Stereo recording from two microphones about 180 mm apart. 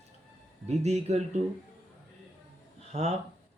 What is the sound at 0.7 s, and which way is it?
Speech, 35° right (ahead or behind).